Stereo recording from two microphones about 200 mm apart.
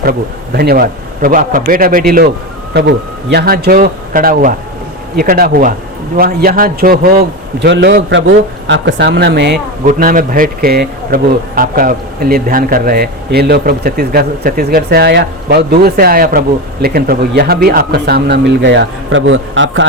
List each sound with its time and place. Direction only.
0.0 s a man's voice: 50° right (ahead or behind)
2.7 s a man's voice: 55° right (ahead or behind)
9.8 s a man's voice: 45° right (ahead or behind); by 19.8 s 70° right (ahead or behind)